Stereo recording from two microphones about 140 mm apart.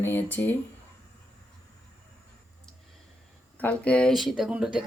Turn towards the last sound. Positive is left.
turn(degrees=-5)  # may be behind; listen again after turning